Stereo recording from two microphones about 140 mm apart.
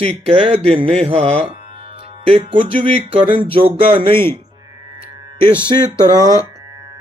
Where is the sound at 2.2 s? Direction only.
45° right (ahead or behind).